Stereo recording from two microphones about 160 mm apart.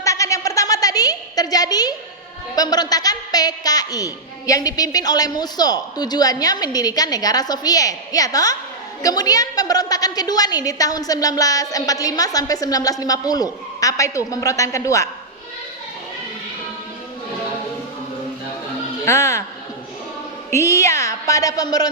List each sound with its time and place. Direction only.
0.0 s a sound: 20° left (ahead or behind)
2.6 s a woman's voice: 25° left (ahead or behind)
19.0 s speech: 20° left (ahead or behind)
20.5 s a woman's voice: 20° left (ahead or behind)